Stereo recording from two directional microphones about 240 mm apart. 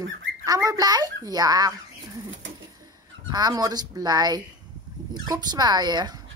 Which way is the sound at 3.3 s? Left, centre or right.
Centre.